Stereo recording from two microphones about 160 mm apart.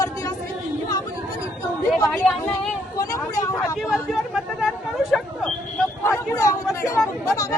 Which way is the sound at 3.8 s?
Centre (ahead or behind).